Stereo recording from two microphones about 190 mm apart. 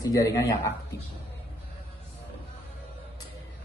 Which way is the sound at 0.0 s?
20° left (ahead or behind).